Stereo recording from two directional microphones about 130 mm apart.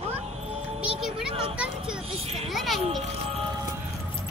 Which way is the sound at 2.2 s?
50° right (ahead or behind).